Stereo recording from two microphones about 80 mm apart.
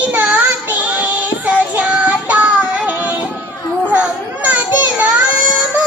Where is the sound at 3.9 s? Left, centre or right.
Centre.